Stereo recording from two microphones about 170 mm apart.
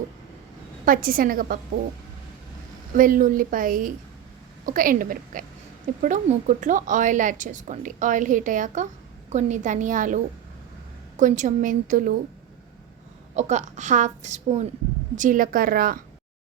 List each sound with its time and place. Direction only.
0.9 s a woman's voice: 55° right (ahead or behind)
2.9 s a woman's voice: 55° right (ahead or behind)
11.2 s a woman's voice: 45° right (ahead or behind)
13.3 s a woman's voice: 45° right (ahead or behind)